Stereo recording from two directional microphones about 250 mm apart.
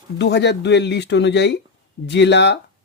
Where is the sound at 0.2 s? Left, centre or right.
Left.